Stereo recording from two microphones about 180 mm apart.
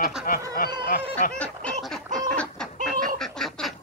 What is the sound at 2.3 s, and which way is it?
Chicken, 5° left (ahead or behind).